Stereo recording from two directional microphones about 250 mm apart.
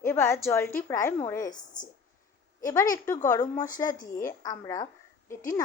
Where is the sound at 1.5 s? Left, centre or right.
Left.